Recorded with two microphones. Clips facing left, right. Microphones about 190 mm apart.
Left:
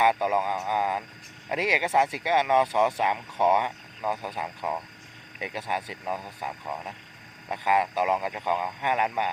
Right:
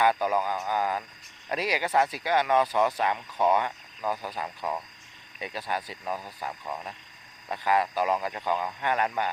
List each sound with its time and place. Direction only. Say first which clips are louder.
0.0 s a man's voice: left 1 dB; 20° left (ahead or behind)